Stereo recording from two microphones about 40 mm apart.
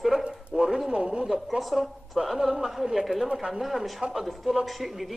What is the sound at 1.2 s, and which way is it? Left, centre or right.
A woman's voice, centre.